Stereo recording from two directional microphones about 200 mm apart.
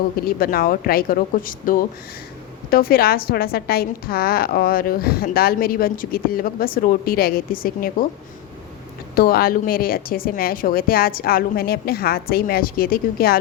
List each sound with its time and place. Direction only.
0.3 s a woman's voice: 45° left (ahead or behind)
9.1 s a woman's voice: 45° left (ahead or behind)